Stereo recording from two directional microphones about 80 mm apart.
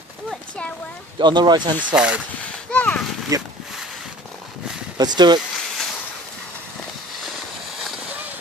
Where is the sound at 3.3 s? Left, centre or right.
Right.